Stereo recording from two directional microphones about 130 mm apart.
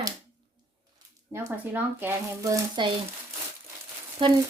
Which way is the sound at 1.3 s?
25° right (ahead or behind).